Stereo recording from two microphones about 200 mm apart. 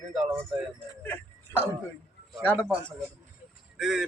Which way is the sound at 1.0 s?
10° left (ahead or behind).